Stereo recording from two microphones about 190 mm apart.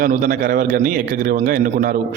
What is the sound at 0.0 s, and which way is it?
A man's voice, 45° right (ahead or behind).